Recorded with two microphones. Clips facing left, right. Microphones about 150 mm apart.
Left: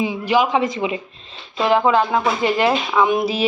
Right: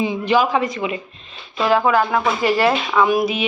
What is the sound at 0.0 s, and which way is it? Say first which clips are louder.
Speech: right 1 dB; 10° left (ahead or behind).